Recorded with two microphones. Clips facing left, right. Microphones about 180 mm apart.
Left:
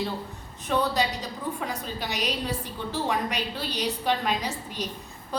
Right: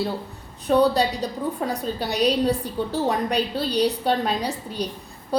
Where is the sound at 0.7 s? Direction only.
35° right (ahead or behind).